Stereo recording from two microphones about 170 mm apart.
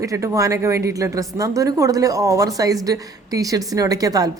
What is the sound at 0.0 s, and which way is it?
A woman's voice, 20° right (ahead or behind).